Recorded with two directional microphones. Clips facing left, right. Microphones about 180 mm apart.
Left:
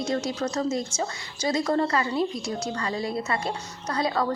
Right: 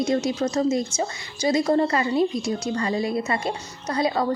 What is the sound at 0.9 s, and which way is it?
A woman's voice, 10° right (ahead or behind).